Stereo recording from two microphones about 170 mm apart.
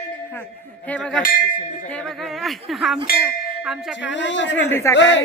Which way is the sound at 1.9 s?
Centre (ahead or behind).